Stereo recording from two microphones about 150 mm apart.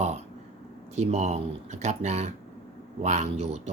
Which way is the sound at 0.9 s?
45° right (ahead or behind).